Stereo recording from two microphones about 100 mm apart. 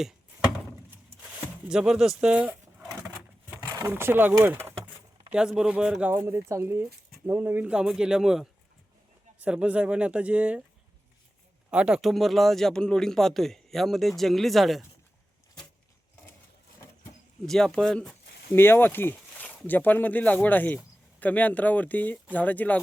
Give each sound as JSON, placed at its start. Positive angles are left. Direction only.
{"t": 1.2, "sound": "speech", "side_deg": -10}
{"t": 3.8, "sound": "speech", "side_deg": -25}
{"t": 5.3, "sound": "speech", "side_deg": -5}
{"t": 6.1, "sound": "speech", "side_deg": -25}
{"t": 7.7, "sound": "speech", "side_deg": -5}
{"t": 11.7, "sound": "speech", "side_deg": -10}
{"t": 17.4, "sound": "speech", "side_deg": 5}
{"t": 18.5, "sound": "speech", "side_deg": 25}